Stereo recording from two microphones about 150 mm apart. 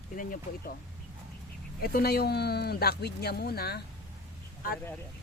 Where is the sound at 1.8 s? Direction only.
85° left.